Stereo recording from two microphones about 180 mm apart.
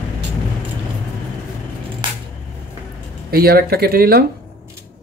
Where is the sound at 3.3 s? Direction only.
60° right (ahead or behind).